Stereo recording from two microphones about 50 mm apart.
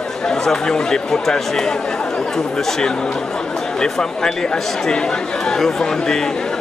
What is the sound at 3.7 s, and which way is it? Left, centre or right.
Speech, centre.